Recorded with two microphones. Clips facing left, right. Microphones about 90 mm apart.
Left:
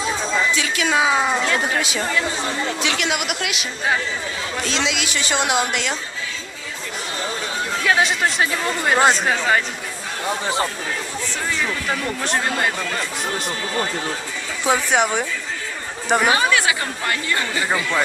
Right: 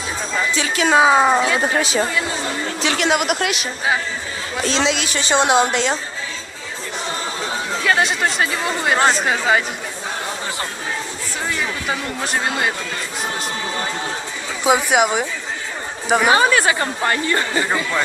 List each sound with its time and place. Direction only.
0.5 s speech: 35° right (ahead or behind)
7.9 s speech: centre (ahead or behind)
11.9 s speech: 5° right (ahead or behind)
14.6 s speech: 15° right (ahead or behind)
16.3 s speech: 35° right (ahead or behind)